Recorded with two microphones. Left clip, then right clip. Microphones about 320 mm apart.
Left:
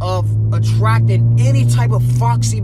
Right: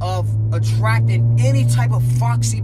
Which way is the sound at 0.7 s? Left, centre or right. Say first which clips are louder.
Left 3 dB; centre.